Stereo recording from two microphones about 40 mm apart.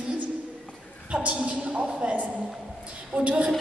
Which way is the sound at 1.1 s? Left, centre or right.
Right.